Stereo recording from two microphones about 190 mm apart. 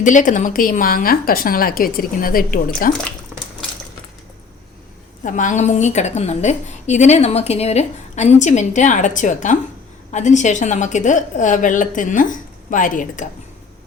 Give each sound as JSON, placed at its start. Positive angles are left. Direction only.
{"t": 0.0, "sound": "a woman's voice", "side_deg": 40}
{"t": 5.2, "sound": "a woman's voice", "side_deg": 40}